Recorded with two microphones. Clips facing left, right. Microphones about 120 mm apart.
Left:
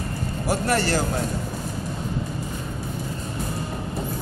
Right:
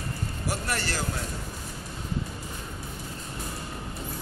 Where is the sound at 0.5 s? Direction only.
40° left (ahead or behind).